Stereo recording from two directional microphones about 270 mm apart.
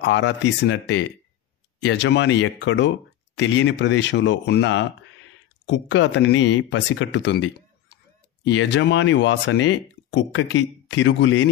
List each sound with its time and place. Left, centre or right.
0.0 s speech: left